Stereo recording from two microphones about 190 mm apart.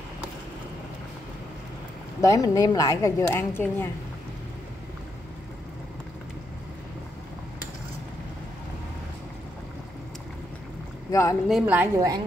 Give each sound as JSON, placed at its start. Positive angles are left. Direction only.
{"t": 2.2, "sound": "speech", "side_deg": 15}
{"t": 11.1, "sound": "speech", "side_deg": 15}
{"t": 11.4, "sound": "a woman's voice", "side_deg": -5}